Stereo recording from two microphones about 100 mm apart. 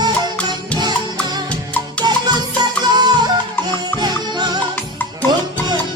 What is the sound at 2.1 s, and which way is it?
Music, 45° right (ahead or behind).